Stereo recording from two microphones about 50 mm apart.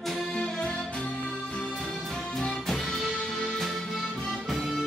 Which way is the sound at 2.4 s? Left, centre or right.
Centre.